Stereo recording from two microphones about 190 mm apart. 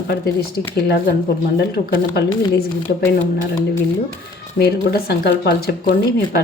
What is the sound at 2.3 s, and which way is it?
Speech, 20° left (ahead or behind).